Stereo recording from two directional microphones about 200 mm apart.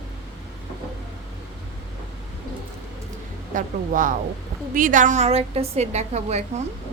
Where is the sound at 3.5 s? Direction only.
40° right (ahead or behind).